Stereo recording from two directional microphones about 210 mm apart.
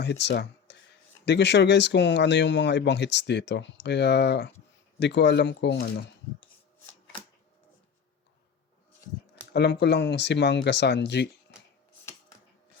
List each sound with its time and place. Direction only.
0.0 s speech: 55° left (ahead or behind)
9.5 s speech: 55° left (ahead or behind)